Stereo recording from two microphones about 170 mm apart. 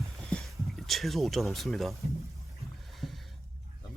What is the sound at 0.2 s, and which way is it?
Speech, centre (ahead or behind).